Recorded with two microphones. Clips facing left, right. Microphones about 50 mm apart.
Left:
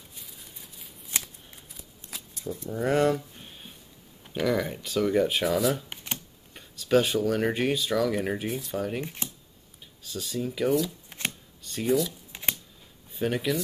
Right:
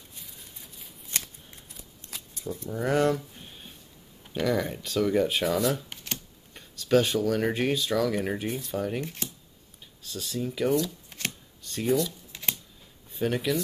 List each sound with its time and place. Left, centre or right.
0.1 s shuffling cards: centre
4.2 s speech: centre
9.0 s speech: centre
10.0 s speech: centre
11.1 s shuffling cards: left
11.6 s speech: centre
12.3 s shuffling cards: centre
13.1 s speech: centre